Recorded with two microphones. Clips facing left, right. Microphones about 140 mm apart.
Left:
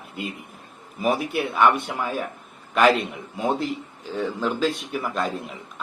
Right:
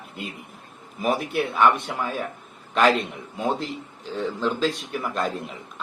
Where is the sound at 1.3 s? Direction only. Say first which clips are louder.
Right 1 dB; 5° left (ahead or behind).